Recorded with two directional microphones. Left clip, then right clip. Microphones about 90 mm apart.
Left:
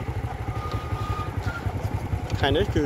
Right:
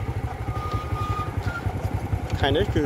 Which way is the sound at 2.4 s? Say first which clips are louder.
Even; 20° left (ahead or behind).